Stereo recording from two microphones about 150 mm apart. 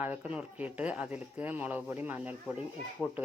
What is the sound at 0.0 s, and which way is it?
Speech, 10° right (ahead or behind).